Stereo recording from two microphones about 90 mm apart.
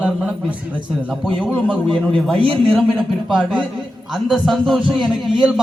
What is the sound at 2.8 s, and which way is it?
A man's voice, centre (ahead or behind).